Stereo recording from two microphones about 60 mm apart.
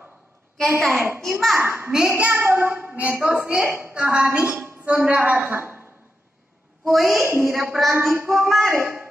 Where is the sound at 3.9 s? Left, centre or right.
Right.